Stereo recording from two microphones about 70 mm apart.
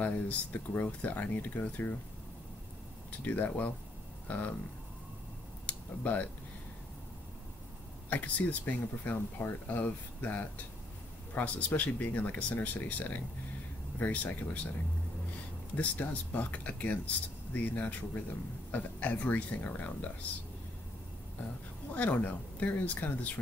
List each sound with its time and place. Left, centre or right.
0.0 s speech: left
3.3 s speech: left
5.7 s speech: left
8.1 s speech: left
15.7 s speech: left
21.9 s speech: left